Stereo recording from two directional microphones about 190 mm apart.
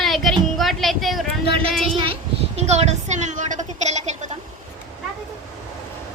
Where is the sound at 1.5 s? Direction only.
30° right (ahead or behind).